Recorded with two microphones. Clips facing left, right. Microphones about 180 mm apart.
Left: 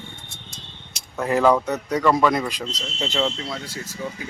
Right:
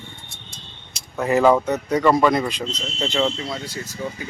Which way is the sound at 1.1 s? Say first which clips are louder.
Right 2 dB; 5° right (ahead or behind).